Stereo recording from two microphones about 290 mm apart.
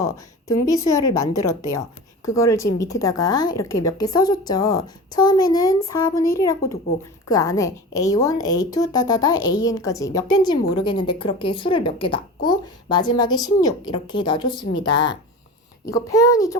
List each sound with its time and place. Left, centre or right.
0.0 s a woman's voice: centre